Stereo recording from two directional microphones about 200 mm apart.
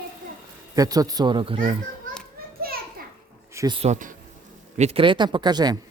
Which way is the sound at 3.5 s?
15° right (ahead or behind).